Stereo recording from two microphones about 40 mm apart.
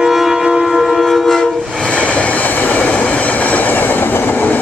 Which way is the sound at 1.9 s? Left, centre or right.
Left.